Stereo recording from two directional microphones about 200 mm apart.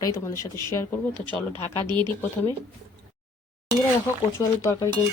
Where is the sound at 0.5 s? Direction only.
10° left (ahead or behind).